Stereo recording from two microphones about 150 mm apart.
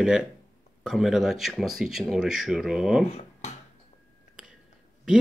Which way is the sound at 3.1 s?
50° left (ahead or behind).